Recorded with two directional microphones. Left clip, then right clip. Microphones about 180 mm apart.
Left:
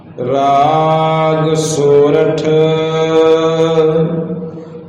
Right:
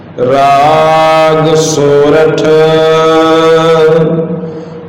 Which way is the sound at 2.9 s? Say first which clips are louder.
Right 4 dB; 15° right (ahead or behind).